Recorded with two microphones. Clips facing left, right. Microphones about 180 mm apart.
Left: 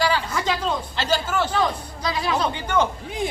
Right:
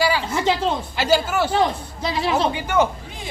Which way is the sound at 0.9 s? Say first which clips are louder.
Right 5 dB; 10° right (ahead or behind).